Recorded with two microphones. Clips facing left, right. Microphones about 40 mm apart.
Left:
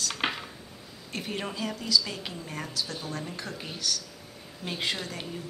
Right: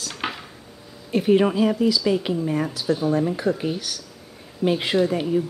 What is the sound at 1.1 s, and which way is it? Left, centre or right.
Speech, centre.